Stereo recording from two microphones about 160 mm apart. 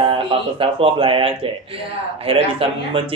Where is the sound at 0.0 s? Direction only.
35° right (ahead or behind).